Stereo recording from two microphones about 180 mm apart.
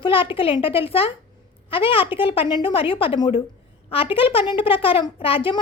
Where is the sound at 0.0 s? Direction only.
30° left (ahead or behind).